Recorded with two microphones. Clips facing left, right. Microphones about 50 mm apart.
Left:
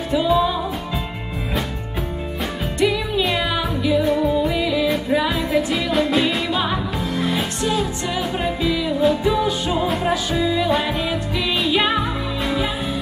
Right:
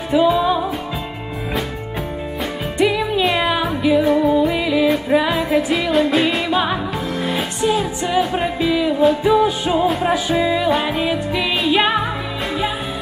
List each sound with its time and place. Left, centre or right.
0.1 s music: centre
2.8 s music: centre
4.0 s music: centre
5.9 s music: centre
6.5 s music: centre